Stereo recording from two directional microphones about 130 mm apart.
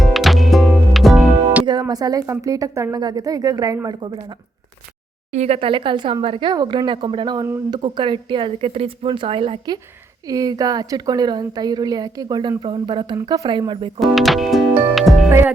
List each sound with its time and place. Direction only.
0.0 s music: centre (ahead or behind)
1.6 s speech: 30° right (ahead or behind)
5.3 s a woman's voice: 55° right (ahead or behind); by 9.8 s 40° right (ahead or behind)
10.2 s a woman's voice: 30° right (ahead or behind)
14.0 s music: centre (ahead or behind)
15.3 s speech: 15° right (ahead or behind)